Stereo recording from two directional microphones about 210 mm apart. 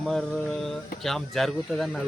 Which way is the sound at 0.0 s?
Centre (ahead or behind).